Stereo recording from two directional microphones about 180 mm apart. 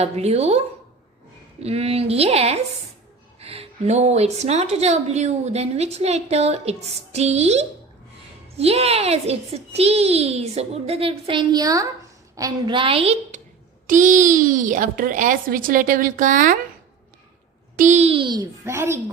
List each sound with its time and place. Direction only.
0.0 s a woman's voice: 35° right (ahead or behind)
1.6 s a woman's voice: 35° right (ahead or behind)
13.8 s speech: 45° right (ahead or behind)
17.7 s a child's voice: 40° right (ahead or behind); by 18.9 s 15° right (ahead or behind)